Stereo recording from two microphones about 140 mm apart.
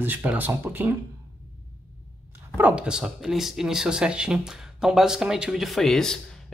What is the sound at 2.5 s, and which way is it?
Speech, 10° right (ahead or behind).